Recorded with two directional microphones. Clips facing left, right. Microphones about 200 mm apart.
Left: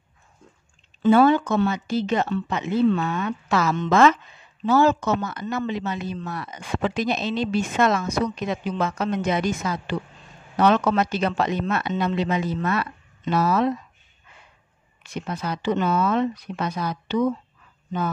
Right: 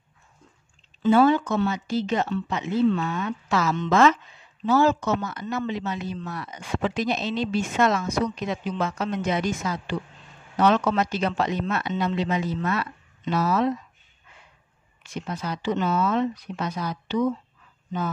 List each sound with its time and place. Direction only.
1.0 s speech: 60° left (ahead or behind)
15.0 s speech: 60° left (ahead or behind)